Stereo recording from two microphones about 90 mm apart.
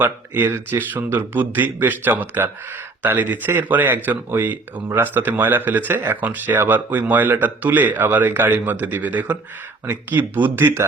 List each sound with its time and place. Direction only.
0.0 s speech: 20° right (ahead or behind)